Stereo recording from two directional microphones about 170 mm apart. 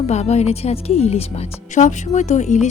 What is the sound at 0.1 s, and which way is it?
A woman's voice, 40° left (ahead or behind).